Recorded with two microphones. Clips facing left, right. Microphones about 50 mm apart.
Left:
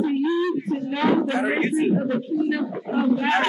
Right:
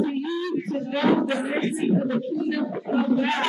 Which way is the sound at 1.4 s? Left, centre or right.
Left.